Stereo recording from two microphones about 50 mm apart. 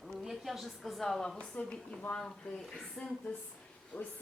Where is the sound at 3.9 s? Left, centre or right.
Left.